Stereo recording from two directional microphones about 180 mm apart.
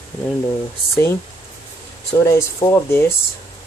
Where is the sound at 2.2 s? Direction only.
15° left (ahead or behind).